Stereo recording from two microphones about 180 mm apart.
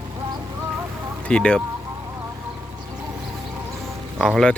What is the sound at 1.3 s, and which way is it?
Speech, 5° left (ahead or behind).